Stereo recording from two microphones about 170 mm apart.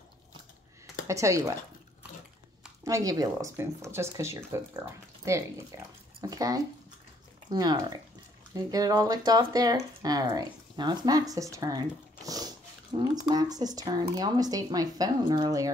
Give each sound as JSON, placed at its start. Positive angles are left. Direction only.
{"t": 1.0, "sound": "speech", "side_deg": -20}
{"t": 2.8, "sound": "speech", "side_deg": -20}